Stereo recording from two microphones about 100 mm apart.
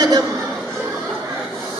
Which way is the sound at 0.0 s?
40° right (ahead or behind).